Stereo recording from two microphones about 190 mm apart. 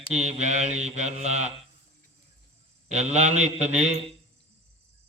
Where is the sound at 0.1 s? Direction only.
35° right (ahead or behind).